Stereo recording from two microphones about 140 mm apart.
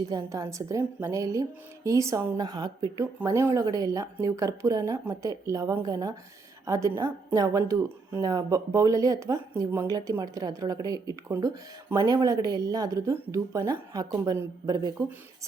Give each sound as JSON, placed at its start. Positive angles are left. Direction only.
{"t": 0.1, "sound": "a woman's voice", "side_deg": -25}